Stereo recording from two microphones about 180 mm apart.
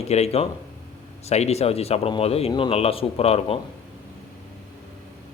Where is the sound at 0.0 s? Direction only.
35° left (ahead or behind).